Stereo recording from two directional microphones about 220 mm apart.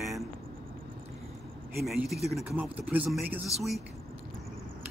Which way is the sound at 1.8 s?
Centre (ahead or behind).